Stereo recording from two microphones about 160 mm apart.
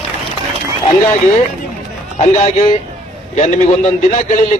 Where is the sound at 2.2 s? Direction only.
45° left (ahead or behind).